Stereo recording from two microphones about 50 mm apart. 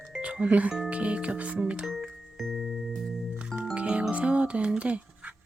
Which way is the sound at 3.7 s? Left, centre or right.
Right.